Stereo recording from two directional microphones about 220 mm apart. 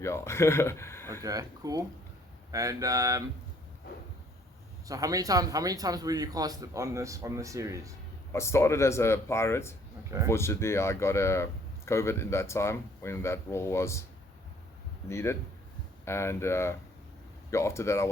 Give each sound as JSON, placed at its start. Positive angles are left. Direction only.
{"t": 0.0, "sound": "speech", "side_deg": 10}
{"t": 1.1, "sound": "speech", "side_deg": -15}
{"t": 4.9, "sound": "speech", "side_deg": -15}
{"t": 8.3, "sound": "speech", "side_deg": 10}
{"t": 15.0, "sound": "speech", "side_deg": 10}